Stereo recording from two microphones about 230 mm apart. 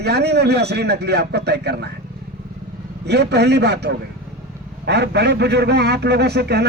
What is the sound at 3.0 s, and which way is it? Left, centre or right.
A man's voice, right.